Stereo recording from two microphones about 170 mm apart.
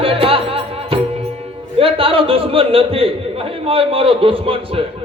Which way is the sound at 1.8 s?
35° right (ahead or behind).